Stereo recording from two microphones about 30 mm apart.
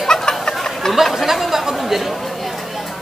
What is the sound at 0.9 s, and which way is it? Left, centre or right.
Speech, centre.